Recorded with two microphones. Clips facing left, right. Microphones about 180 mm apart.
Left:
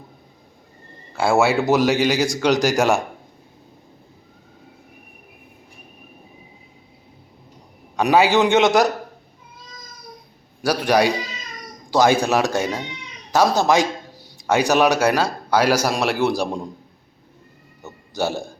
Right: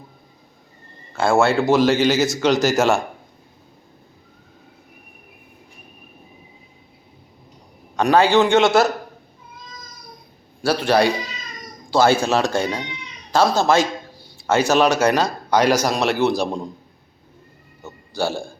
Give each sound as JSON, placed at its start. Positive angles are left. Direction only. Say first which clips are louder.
{"t": 1.1, "sound": "speech", "louder": "right 1 dB", "side_deg": 5}
{"t": 2.2, "sound": "speech", "louder": "right 1 dB", "side_deg": 10}
{"t": 7.9, "sound": "speech", "louder": "right 1 dB", "side_deg": 5}
{"t": 8.4, "sound": "speech", "louder": "even", "side_deg": 20}
{"t": 10.6, "sound": "speech", "louder": "right 1 dB", "side_deg": 15}
{"t": 18.1, "sound": "a man's voice", "louder": "even", "side_deg": 20}